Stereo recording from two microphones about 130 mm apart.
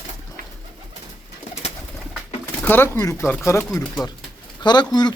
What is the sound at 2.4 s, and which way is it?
Speech, 15° left (ahead or behind).